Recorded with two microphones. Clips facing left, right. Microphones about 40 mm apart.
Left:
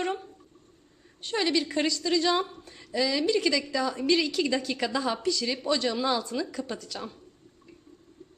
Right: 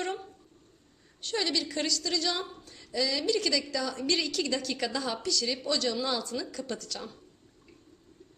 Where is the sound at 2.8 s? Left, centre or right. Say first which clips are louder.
Left 3 dB; centre.